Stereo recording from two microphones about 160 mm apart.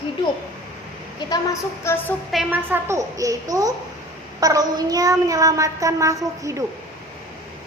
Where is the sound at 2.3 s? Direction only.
5° right (ahead or behind).